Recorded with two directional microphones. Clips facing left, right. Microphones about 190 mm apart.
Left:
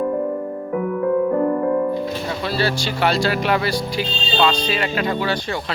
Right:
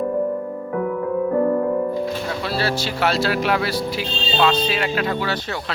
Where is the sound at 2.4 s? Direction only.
Centre (ahead or behind).